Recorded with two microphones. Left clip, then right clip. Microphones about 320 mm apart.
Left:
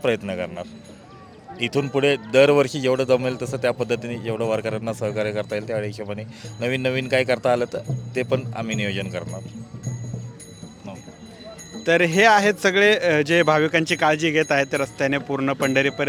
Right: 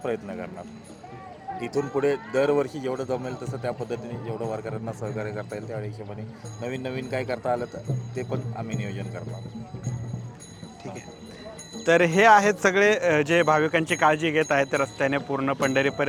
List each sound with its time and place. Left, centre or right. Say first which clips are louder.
0.0 s speech: left 7 dB; left
1.7 s speech: left 4 dB; left
11.8 s speech: left 2 dB; centre